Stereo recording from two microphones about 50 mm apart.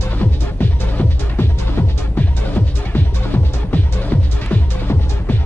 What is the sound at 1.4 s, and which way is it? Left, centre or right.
Music, left.